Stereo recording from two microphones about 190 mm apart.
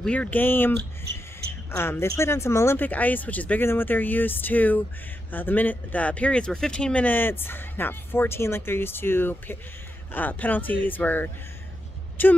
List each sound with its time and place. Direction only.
0.0 s speech: 5° left (ahead or behind)